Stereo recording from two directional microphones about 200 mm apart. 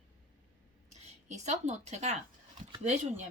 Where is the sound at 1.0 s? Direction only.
35° right (ahead or behind).